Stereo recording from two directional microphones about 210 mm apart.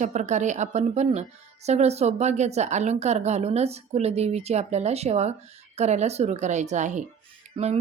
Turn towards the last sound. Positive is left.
turn(degrees=-25)  # may be behind; listen again after turning